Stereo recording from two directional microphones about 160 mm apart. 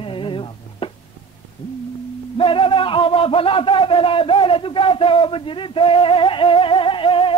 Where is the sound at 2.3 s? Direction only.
35° left (ahead or behind).